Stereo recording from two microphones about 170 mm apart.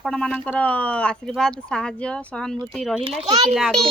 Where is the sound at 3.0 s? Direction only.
35° right (ahead or behind).